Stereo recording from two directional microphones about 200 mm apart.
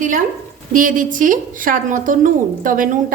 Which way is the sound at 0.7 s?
40° right (ahead or behind).